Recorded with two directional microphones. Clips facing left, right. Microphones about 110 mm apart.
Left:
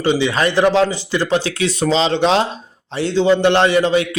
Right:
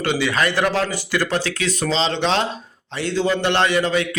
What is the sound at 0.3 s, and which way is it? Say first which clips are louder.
A man's voice: left 5 dB; 30° left (ahead or behind).